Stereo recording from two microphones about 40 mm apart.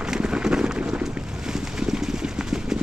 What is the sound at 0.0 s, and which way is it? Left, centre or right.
Run, right.